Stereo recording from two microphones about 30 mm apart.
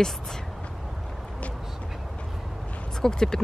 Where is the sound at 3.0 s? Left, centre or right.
Centre.